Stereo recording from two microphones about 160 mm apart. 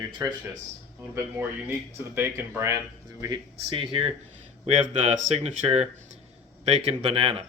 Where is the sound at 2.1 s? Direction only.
15° right (ahead or behind).